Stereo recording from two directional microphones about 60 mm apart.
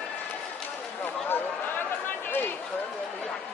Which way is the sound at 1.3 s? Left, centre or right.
Left.